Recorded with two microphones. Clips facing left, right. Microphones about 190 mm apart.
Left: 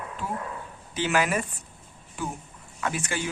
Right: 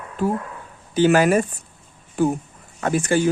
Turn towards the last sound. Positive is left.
turn(degrees=-45)  # may be behind; listen again after turning